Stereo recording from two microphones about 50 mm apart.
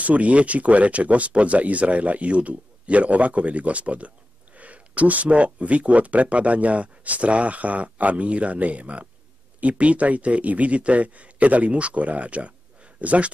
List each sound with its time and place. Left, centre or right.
0.0 s speech: right